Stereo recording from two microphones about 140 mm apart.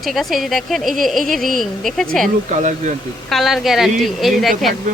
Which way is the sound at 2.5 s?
60° right (ahead or behind).